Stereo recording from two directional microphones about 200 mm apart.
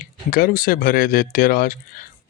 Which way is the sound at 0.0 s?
45° left (ahead or behind).